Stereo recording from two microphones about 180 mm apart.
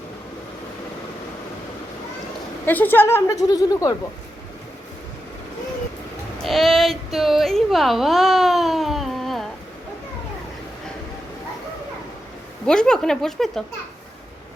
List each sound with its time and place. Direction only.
2.6 s a woman's voice: 10° left (ahead or behind)
6.4 s a woman's voice: centre (ahead or behind)
12.6 s a woman's voice: 5° left (ahead or behind)